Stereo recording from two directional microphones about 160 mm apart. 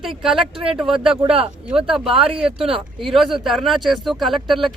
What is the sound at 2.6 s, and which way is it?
Speech, 35° right (ahead or behind).